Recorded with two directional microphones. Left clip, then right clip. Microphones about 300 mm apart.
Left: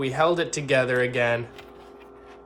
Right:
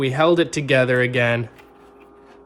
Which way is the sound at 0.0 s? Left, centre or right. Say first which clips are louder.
Right 5 dB; right.